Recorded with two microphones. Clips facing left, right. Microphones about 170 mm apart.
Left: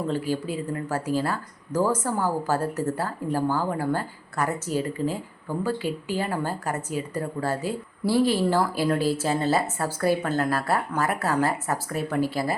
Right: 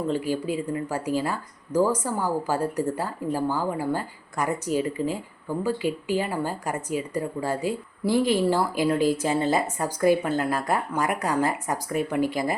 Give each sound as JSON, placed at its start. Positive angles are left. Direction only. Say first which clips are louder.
{"t": 0.1, "sound": "speech", "louder": "right 1 dB", "side_deg": -15}
{"t": 5.8, "sound": "speech", "louder": "right 2 dB", "side_deg": 40}
{"t": 6.1, "sound": "speech", "louder": "right 1 dB", "side_deg": -10}